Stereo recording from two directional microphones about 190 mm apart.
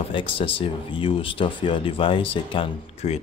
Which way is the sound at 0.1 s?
25° left (ahead or behind).